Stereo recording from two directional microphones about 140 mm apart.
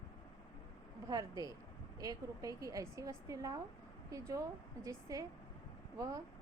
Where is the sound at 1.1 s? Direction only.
25° right (ahead or behind).